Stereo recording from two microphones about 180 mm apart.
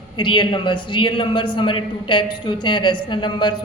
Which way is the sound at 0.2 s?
25° left (ahead or behind).